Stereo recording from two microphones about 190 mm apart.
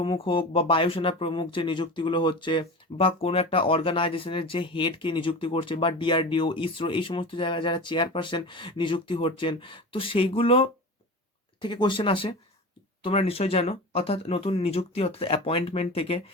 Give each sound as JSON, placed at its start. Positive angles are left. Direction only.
{"t": 0.0, "sound": "speech", "side_deg": 30}